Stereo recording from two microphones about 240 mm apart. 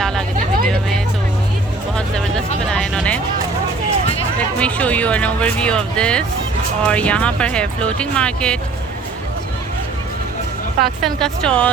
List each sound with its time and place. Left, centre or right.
0.3 s vehicle: right
0.7 s music: centre
2.0 s a sound: centre
2.6 s music: centre
4.6 s speech: centre
10.8 s speech: centre